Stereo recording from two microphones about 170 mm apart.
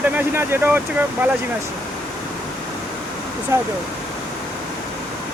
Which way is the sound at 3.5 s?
15° right (ahead or behind).